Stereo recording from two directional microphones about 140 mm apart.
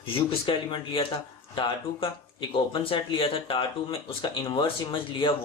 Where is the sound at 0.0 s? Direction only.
40° left (ahead or behind).